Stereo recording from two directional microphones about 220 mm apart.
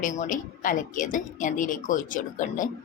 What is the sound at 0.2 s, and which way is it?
A woman's voice, 35° left (ahead or behind).